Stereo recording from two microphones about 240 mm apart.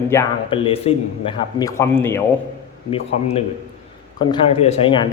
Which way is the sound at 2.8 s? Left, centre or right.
Left.